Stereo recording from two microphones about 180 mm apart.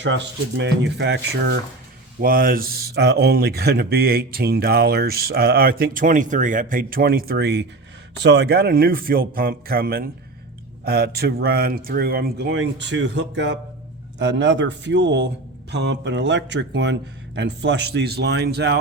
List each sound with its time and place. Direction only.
0.0 s speech: 90° right
2.2 s speech: 55° right (ahead or behind)